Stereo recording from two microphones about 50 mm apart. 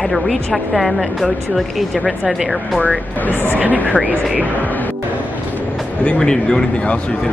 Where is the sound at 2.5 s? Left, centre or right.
Left.